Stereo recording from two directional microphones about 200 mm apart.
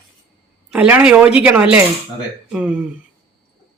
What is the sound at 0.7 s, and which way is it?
Speech, 5° right (ahead or behind).